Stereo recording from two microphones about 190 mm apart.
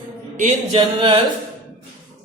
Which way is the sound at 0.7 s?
25° right (ahead or behind).